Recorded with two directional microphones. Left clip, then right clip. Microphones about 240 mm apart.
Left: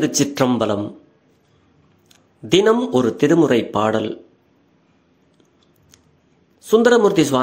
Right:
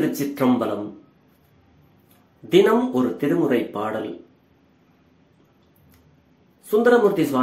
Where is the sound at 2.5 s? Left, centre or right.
Left.